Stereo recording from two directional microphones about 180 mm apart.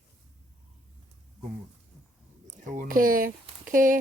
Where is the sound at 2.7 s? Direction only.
50° right (ahead or behind).